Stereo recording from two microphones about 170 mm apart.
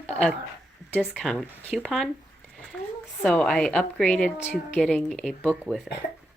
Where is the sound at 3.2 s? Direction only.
5° left (ahead or behind).